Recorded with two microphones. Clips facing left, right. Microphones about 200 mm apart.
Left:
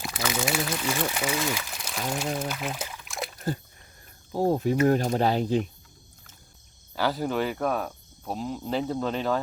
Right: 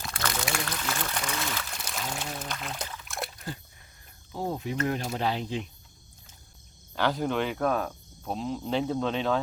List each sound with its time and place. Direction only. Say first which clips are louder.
0.1 s speech: left 4 dB; 5° left (ahead or behind)
3.3 s splash: left 8 dB; 45° left (ahead or behind)
4.3 s speech: left 8 dB; 40° left (ahead or behind)
6.9 s speech: left 1 dB; 5° left (ahead or behind)